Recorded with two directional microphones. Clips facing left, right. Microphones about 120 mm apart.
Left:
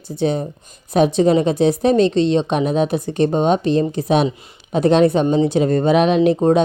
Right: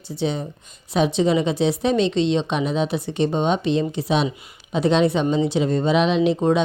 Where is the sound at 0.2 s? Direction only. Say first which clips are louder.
Left 5 dB; 50° left (ahead or behind).